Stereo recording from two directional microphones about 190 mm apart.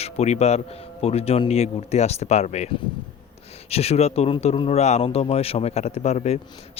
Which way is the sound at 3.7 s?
30° left (ahead or behind).